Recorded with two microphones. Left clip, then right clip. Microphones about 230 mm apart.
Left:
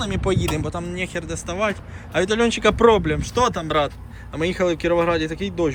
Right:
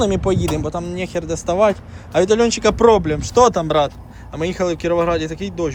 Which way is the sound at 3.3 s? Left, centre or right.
Right.